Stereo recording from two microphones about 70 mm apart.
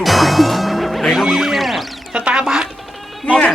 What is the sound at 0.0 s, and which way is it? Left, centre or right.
Music, centre.